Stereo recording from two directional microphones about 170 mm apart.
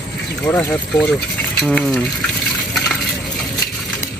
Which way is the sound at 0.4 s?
10° left (ahead or behind).